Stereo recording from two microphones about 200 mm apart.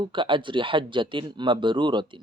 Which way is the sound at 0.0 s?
25° right (ahead or behind).